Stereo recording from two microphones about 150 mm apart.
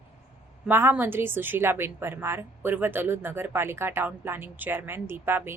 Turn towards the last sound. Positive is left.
turn(degrees=-15)  # may be behind; listen again after turning